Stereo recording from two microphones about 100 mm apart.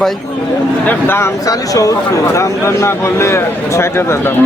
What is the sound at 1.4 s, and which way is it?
A man's voice, 35° left (ahead or behind).